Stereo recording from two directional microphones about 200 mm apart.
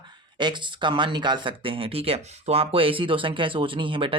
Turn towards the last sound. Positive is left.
turn(degrees=-25)  # may be behind; listen again after turning